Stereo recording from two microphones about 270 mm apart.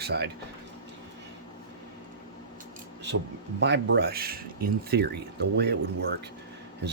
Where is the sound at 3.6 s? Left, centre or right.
Right.